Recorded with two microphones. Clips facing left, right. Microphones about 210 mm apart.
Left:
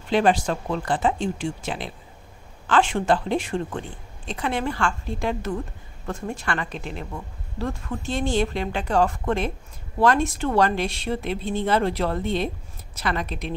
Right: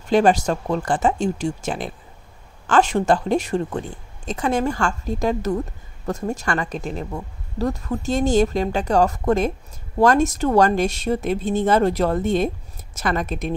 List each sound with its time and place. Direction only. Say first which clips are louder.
0.1 s a woman's voice: right 4 dB; 45° right (ahead or behind)